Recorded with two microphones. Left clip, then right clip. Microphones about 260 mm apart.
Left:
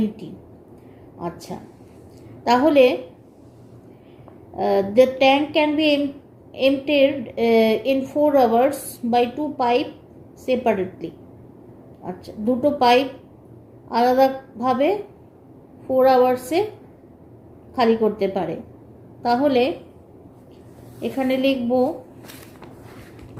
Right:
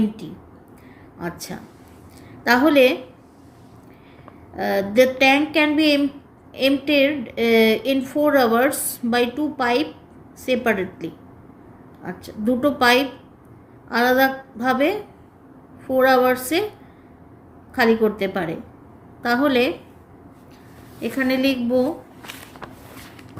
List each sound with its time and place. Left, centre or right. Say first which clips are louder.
1.2 s a woman's voice: even; right
4.5 s a woman's voice: left 1 dB; right
17.7 s a woman's voice: even; right
21.0 s a woman's voice: even; right